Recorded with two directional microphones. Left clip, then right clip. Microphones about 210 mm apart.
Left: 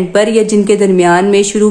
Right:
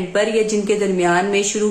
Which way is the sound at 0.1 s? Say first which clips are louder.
Left 7 dB; 40° left (ahead or behind).